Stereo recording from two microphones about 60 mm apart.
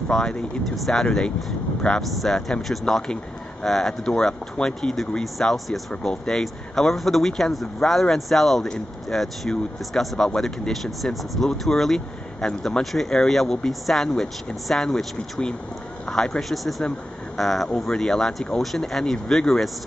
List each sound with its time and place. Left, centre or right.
0.1 s speech: centre